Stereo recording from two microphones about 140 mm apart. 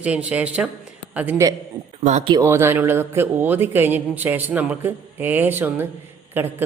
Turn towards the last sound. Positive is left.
turn(degrees=-15)  # may be behind; listen again after turning